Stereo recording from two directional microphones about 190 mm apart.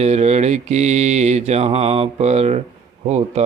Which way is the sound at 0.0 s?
35° right (ahead or behind).